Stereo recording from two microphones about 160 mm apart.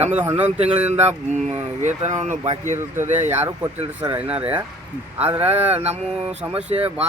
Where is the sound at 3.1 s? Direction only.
45° right (ahead or behind).